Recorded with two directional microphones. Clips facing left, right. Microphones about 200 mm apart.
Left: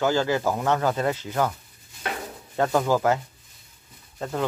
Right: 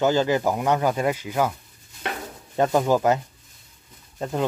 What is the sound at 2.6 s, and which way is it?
Speech, 15° right (ahead or behind).